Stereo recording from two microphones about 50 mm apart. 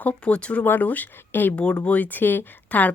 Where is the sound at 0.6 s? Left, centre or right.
Left.